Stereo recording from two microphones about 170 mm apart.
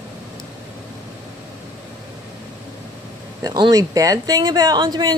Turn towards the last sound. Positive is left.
turn(degrees=-25)  # may be behind; listen again after turning